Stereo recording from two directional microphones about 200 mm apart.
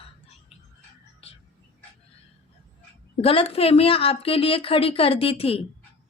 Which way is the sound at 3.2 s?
30° left (ahead or behind).